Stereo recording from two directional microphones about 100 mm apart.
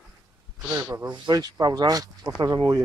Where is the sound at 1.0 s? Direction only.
45° right (ahead or behind).